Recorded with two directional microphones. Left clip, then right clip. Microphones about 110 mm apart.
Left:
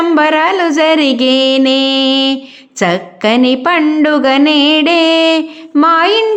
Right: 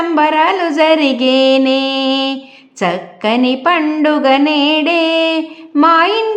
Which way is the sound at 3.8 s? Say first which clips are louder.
Left 4 dB; 10° left (ahead or behind).